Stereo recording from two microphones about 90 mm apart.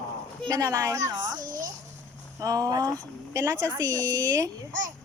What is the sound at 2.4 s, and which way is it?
A woman's voice, 40° right (ahead or behind).